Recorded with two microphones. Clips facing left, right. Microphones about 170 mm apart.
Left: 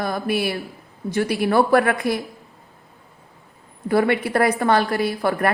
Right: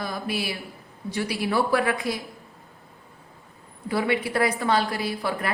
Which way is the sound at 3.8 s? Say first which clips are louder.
Left 6 dB; 55° left (ahead or behind).